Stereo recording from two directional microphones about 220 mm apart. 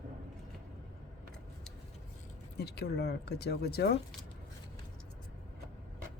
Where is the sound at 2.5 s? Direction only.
50° left (ahead or behind).